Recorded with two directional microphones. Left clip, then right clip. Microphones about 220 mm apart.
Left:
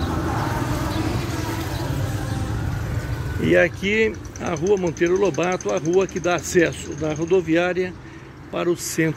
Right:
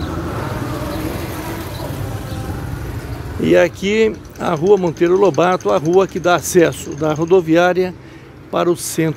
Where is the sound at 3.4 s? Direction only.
15° right (ahead or behind).